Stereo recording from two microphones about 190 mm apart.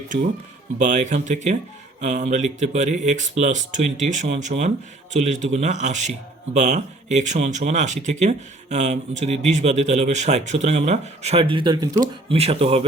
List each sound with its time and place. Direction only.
0.8 s a man's voice: 40° right (ahead or behind)